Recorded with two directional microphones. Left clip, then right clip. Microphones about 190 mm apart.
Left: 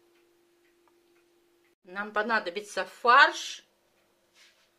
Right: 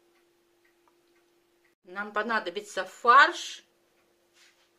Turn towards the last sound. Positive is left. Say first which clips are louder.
# right 1 dB
turn(degrees=0)  # may be behind; listen again after turning